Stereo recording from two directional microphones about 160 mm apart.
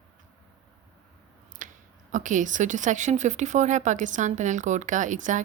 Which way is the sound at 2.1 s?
50° right (ahead or behind).